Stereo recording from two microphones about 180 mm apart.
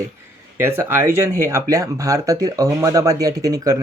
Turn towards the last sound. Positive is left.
turn(degrees=-20)  # may be behind; listen again after turning